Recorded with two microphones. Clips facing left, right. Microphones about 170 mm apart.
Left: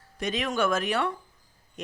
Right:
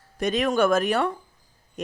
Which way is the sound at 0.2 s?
45° right (ahead or behind).